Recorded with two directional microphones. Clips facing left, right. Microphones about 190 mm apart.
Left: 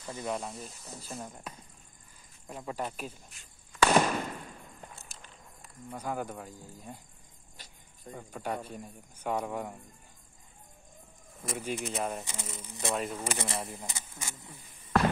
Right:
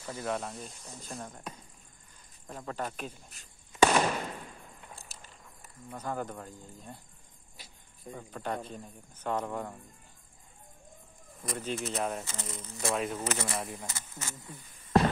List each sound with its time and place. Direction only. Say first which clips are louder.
0.0 s a man's voice: right 1 dB; 5° right (ahead or behind)
3.4 s speech: right 1 dB; 40° right (ahead or behind)
3.7 s fireworks: right 3 dB; 20° right (ahead or behind)
5.1 s walk: even; 5° right (ahead or behind)
5.9 s a man's voice: left 1 dB; 10° left (ahead or behind)
8.1 s a man's voice: even; 5° left (ahead or behind)
11.4 s a man's voice: even; 10° left (ahead or behind)
13.1 s a man's voice: right 1 dB; 10° left (ahead or behind)
13.6 s speech: right 1 dB; centre (ahead or behind)
13.8 s a man's voice: right 1 dB; 15° left (ahead or behind)
14.5 s a sound: right 3 dB; 25° right (ahead or behind)